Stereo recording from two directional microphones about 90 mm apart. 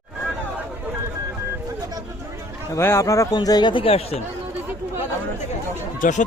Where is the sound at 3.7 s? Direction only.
90° left.